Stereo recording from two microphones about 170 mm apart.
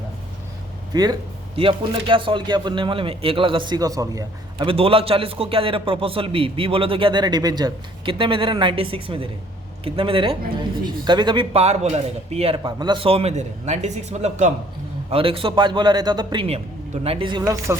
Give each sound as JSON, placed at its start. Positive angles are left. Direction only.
{"t": 0.9, "sound": "speech", "side_deg": -20}
{"t": 4.7, "sound": "a man's voice", "side_deg": -35}
{"t": 12.6, "sound": "a man's voice", "side_deg": -25}
{"t": 15.1, "sound": "speech", "side_deg": -30}